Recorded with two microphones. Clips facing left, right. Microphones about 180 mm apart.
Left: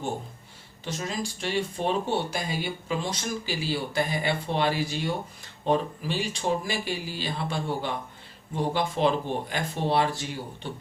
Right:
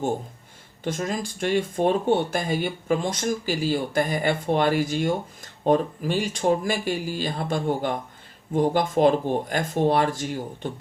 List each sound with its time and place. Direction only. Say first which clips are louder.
0.9 s speech: right 5 dB; 50° right (ahead or behind)